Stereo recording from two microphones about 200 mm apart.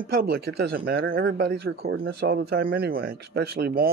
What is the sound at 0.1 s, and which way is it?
Speech, 50° right (ahead or behind).